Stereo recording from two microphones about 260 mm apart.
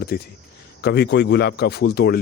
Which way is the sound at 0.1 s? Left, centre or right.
Left.